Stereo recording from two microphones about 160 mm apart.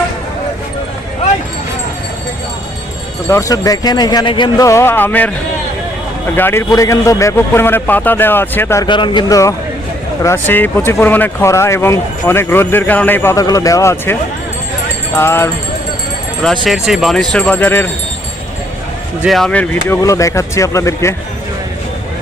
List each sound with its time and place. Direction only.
3.2 s speech: 20° left (ahead or behind)
6.3 s speech: 15° left (ahead or behind)
8.9 s speech: 30° left (ahead or behind)
16.6 s speech: centre (ahead or behind)
19.2 s speech: centre (ahead or behind)
20.0 s speech: 20° left (ahead or behind)